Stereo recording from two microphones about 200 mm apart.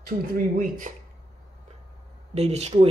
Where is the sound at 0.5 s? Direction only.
40° right (ahead or behind).